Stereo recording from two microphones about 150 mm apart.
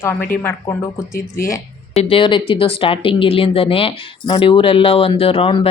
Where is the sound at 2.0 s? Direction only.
35° left (ahead or behind).